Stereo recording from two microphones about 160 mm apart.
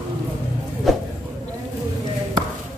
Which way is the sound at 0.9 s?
Centre (ahead or behind).